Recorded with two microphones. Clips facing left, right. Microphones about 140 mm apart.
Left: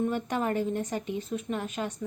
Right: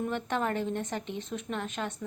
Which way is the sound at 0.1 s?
10° left (ahead or behind).